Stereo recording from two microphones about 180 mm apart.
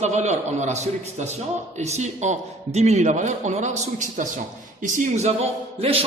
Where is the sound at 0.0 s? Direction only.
40° right (ahead or behind).